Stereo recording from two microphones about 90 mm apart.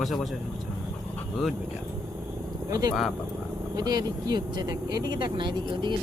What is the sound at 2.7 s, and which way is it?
Speech, 45° right (ahead or behind).